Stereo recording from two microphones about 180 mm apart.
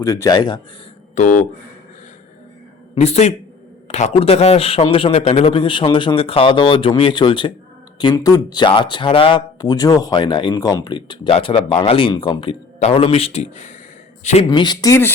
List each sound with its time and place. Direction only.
0.0 s speech: 15° left (ahead or behind)
1.2 s a man's voice: 40° left (ahead or behind)
2.9 s a man's voice: 35° left (ahead or behind); by 15.1 s 15° left (ahead or behind)